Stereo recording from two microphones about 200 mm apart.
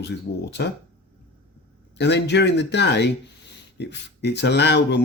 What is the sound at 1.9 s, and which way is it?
Speech, 60° left (ahead or behind).